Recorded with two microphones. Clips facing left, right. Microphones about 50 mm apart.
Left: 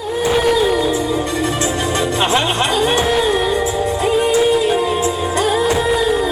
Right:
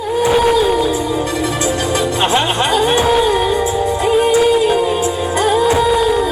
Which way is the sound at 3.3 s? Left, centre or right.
Right.